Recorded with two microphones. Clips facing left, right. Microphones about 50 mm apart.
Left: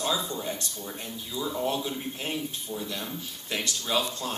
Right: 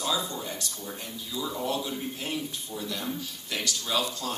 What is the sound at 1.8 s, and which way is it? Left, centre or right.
A man's voice, left.